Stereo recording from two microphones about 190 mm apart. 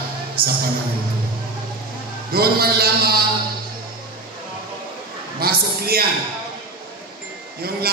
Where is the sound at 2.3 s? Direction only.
55° right (ahead or behind).